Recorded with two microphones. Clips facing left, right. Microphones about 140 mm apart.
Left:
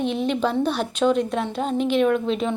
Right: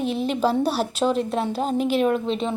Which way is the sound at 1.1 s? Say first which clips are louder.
Left 1 dB; centre (ahead or behind).